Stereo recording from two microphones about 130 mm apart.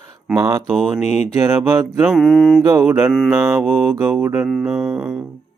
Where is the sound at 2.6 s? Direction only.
20° right (ahead or behind).